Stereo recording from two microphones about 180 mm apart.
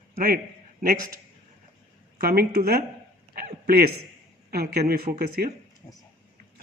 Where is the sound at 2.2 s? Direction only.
55° right (ahead or behind).